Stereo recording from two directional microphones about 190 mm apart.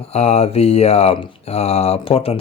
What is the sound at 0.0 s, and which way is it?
Speech, 35° left (ahead or behind).